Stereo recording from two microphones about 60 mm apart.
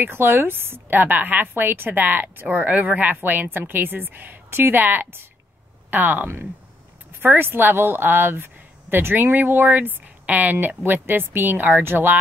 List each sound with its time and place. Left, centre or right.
0.0 s speech: right